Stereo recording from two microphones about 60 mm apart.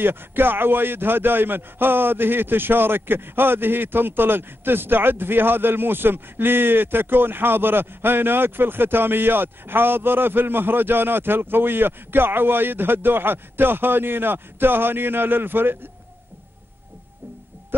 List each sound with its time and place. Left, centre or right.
0.0 s a man's voice: right